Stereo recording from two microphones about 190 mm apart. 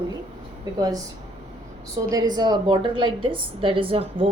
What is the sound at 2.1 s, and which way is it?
A woman's voice, 20° right (ahead or behind).